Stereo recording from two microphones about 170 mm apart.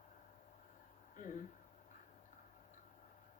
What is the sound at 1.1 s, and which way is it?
Speech, 50° left (ahead or behind).